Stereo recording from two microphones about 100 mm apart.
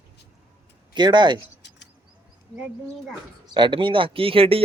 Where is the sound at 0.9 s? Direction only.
50° right (ahead or behind).